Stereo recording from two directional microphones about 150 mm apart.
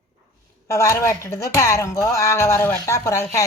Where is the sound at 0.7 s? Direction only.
20° left (ahead or behind).